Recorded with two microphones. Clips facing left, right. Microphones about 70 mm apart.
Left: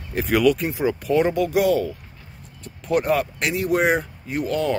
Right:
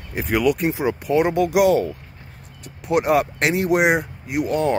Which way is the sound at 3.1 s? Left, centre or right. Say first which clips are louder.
Right 3 dB; right.